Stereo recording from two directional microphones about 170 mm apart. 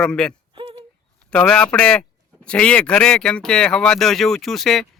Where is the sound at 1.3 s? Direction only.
5° left (ahead or behind).